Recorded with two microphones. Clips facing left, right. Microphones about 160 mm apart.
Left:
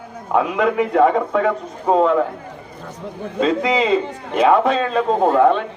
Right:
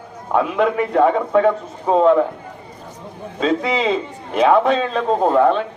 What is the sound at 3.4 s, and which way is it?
A man's voice, centre (ahead or behind).